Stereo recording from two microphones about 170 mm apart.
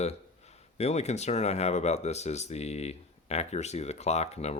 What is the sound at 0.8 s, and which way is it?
Speech, 40° left (ahead or behind).